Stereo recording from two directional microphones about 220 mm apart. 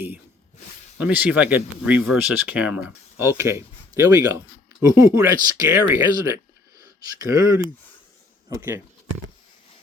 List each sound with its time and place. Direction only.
0.9 s speech: 5° right (ahead or behind)